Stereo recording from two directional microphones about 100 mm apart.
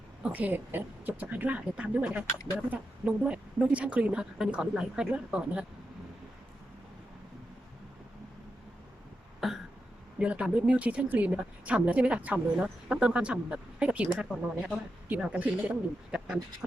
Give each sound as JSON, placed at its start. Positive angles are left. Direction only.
{"t": 0.2, "sound": "a woman's voice", "side_deg": -15}
{"t": 3.2, "sound": "a woman's voice", "side_deg": -10}
{"t": 9.4, "sound": "a sound", "side_deg": 0}
{"t": 10.2, "sound": "a woman's voice", "side_deg": -10}